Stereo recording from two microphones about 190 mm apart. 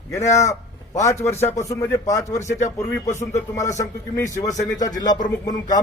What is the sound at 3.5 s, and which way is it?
Speech, 15° left (ahead or behind).